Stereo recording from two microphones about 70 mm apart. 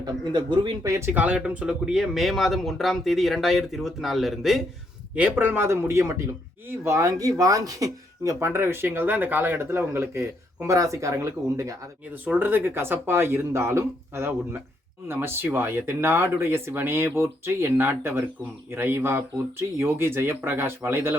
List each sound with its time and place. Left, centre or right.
0.0 s speech: right
0.9 s speech: right
1.1 s speech: right
1.4 s speech: centre
5.1 s speech: centre
5.5 s speech: right
12.1 s speech: right